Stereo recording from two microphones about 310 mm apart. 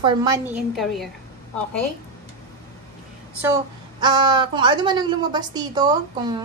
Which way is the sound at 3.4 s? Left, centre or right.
Centre.